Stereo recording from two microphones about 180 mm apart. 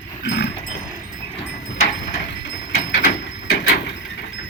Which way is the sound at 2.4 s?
80° left.